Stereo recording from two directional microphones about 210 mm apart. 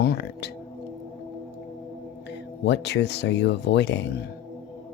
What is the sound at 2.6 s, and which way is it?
Speech, 55° left (ahead or behind).